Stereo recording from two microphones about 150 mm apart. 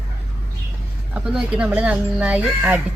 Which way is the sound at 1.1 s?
5° right (ahead or behind).